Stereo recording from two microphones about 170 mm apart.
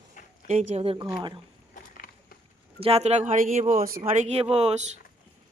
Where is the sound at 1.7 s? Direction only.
55° left (ahead or behind).